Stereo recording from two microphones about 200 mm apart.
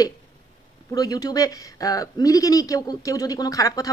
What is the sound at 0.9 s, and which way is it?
Speech, 20° left (ahead or behind).